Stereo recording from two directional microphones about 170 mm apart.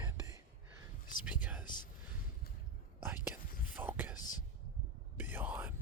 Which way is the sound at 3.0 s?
10° right (ahead or behind).